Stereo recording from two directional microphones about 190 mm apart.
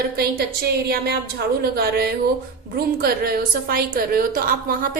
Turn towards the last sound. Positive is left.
turn(degrees=-45)  # may be behind; listen again after turning